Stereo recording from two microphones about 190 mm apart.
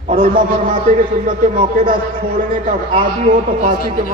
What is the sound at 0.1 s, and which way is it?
Speech, 45° right (ahead or behind).